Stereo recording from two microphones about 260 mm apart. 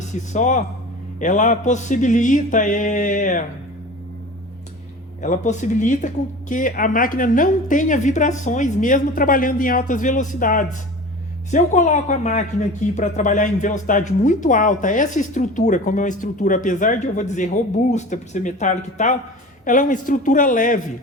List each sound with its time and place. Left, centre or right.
0.0 s a woman's voice: left
5.2 s a woman's voice: left